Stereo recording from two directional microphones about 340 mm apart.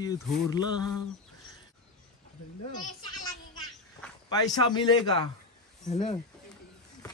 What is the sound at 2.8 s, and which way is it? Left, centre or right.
Speech, centre.